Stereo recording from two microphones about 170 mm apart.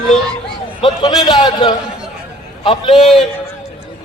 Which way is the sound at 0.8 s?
25° left (ahead or behind).